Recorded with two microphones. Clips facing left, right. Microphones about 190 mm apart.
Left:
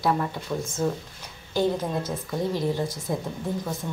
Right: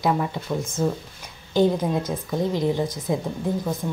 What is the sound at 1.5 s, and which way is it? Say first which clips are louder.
A woman's voice: right 4 dB; 15° right (ahead or behind).